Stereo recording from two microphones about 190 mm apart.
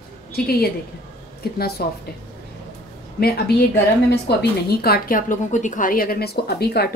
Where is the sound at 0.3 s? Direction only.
55° left (ahead or behind).